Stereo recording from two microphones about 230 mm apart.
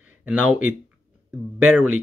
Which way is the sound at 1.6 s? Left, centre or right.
Centre.